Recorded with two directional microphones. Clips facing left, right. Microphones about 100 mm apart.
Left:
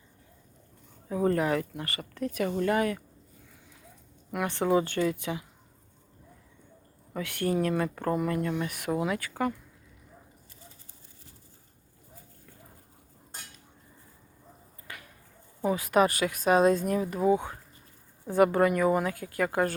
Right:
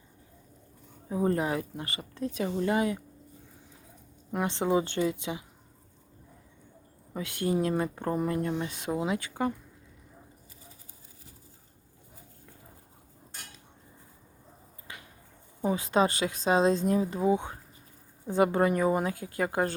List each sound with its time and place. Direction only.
1.0 s speech: 25° right (ahead or behind)
4.4 s speech: 20° right (ahead or behind)
7.1 s speech: 20° right (ahead or behind)
14.9 s a sound: 20° right (ahead or behind)
15.6 s speech: 25° right (ahead or behind)